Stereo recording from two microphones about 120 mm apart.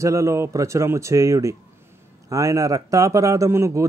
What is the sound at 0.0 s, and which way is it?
Speech, 25° right (ahead or behind).